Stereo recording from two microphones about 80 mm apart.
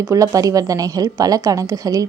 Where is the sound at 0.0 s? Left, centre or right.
Right.